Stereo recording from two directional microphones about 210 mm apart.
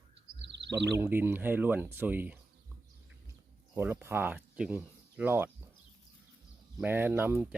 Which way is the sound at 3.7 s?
10° right (ahead or behind).